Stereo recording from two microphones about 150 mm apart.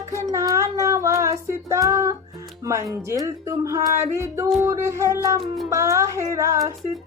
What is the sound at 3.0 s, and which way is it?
Music, 20° right (ahead or behind).